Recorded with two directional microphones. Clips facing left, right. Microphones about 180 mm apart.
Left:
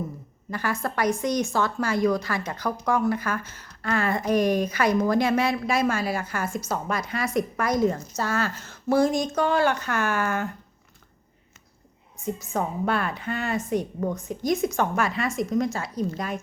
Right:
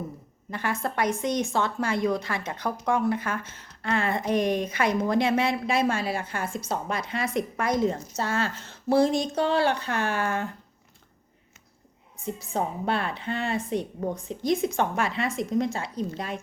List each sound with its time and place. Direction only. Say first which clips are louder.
0.5 s a woman's voice: left 1 dB; 25° right (ahead or behind)
12.2 s a woman's voice: left 1 dB; 30° right (ahead or behind)